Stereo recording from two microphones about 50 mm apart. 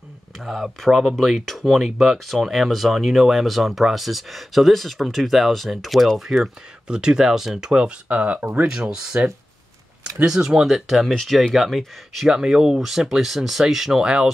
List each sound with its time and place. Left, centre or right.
0.4 s speech: centre
6.9 s speech: centre
7.7 s speech: centre
8.1 s speech: right
8.6 s speech: centre
10.2 s speech: centre